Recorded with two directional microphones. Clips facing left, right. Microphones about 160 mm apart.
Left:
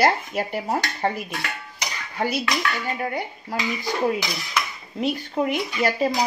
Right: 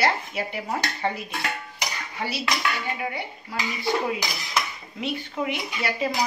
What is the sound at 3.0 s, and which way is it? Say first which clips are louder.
Speech: left 3 dB; 45° left (ahead or behind).